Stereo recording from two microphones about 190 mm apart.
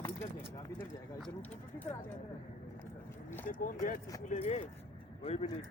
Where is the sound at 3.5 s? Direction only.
45° left (ahead or behind).